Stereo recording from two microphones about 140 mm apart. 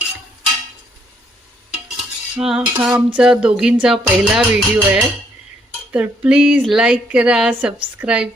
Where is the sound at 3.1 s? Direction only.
5° right (ahead or behind).